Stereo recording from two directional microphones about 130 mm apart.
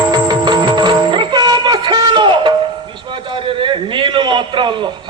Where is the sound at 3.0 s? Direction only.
40° right (ahead or behind).